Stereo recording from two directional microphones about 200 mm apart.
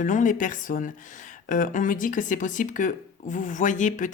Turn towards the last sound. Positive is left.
turn(degrees=40)  # may be behind; listen again after turning